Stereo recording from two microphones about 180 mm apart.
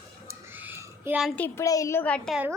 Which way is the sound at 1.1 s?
5° right (ahead or behind).